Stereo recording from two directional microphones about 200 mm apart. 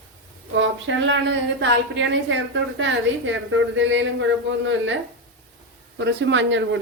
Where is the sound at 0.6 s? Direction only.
65° right (ahead or behind).